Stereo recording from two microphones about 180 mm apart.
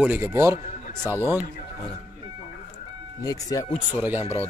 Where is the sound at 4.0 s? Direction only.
10° right (ahead or behind).